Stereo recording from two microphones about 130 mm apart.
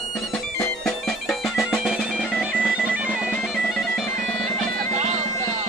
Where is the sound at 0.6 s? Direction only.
Centre (ahead or behind).